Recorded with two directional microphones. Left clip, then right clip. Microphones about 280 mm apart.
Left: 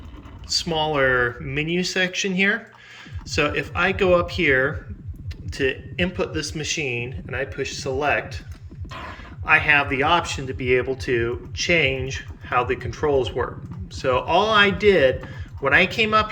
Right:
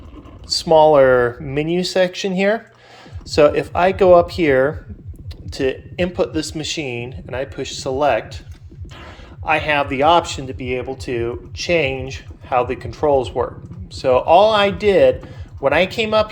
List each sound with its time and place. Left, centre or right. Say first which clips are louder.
0.4 s speech: right 11 dB; centre
9.4 s speech: even; centre